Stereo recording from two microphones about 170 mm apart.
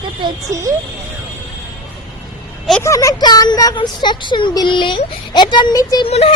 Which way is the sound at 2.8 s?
20° left (ahead or behind).